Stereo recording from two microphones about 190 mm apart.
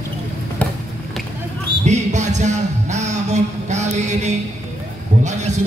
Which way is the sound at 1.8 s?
40° right (ahead or behind).